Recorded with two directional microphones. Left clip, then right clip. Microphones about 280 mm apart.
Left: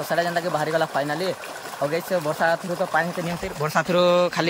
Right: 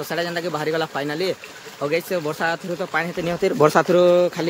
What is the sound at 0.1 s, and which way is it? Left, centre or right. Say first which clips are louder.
Speech: left 2 dB; centre.